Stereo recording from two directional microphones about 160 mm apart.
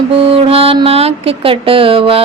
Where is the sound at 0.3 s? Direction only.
35° right (ahead or behind).